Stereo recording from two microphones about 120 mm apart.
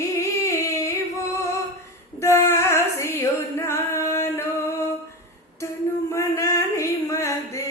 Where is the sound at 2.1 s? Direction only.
25° left (ahead or behind).